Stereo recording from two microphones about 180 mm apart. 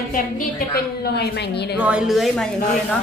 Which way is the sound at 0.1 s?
55° left (ahead or behind).